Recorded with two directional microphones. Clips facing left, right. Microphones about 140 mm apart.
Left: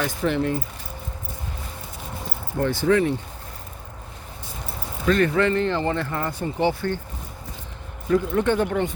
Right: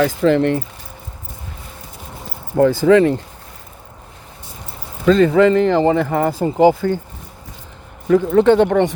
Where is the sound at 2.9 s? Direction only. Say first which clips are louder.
Right 7 dB; 90° right.